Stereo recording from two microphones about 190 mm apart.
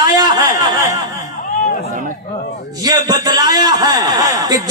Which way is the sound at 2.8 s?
20° right (ahead or behind).